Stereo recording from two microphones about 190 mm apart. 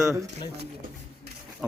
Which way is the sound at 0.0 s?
15° right (ahead or behind).